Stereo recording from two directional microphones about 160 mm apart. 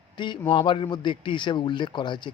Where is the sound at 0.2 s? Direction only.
30° left (ahead or behind).